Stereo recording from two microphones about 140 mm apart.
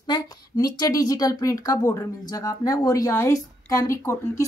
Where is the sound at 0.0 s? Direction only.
30° left (ahead or behind).